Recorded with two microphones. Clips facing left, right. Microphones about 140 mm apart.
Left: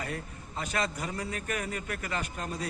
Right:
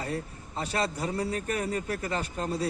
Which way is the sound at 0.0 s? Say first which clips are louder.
Right 4 dB; 30° right (ahead or behind).